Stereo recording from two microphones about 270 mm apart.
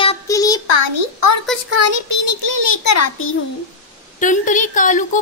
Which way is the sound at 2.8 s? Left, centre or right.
Left.